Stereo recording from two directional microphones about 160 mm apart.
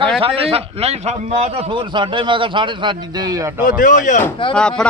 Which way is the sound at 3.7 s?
55° left (ahead or behind).